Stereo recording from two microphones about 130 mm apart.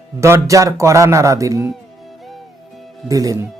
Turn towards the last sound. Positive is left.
turn(degrees=-25)  # may be behind; listen again after turning